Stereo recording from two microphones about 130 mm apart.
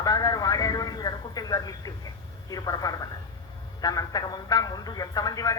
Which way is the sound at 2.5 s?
30° left (ahead or behind).